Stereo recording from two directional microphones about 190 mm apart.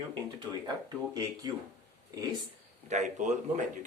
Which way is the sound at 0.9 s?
20° right (ahead or behind).